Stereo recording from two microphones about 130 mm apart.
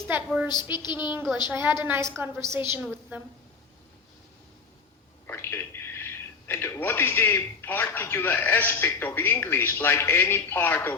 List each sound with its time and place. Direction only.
0.4 s a woman's voice: 35° left (ahead or behind)
1.5 s a woman's voice: 20° right (ahead or behind)
5.2 s a sound: 15° left (ahead or behind)
6.5 s speech: 20° left (ahead or behind)